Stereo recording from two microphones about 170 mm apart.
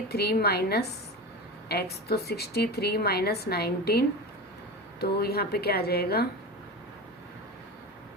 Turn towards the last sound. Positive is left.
turn(degrees=70)  # may be behind; listen again after turning